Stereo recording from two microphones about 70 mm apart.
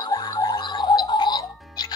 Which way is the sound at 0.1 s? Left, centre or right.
Left.